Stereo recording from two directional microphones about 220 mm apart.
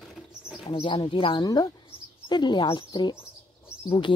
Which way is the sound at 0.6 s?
25° left (ahead or behind).